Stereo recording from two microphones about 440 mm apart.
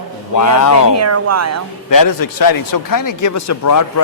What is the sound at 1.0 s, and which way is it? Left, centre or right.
Speech, right.